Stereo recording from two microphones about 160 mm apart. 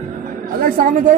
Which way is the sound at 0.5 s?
60° right (ahead or behind).